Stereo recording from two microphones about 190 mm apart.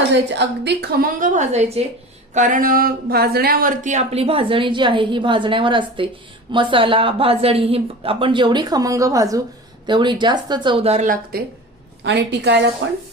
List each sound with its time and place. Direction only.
0.1 s a woman's voice: 65° right (ahead or behind); by 11.4 s 40° right (ahead or behind)
12.0 s a woman's voice: 65° right (ahead or behind)